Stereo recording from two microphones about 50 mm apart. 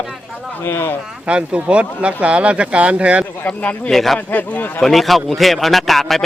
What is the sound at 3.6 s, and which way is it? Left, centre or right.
Speech, left.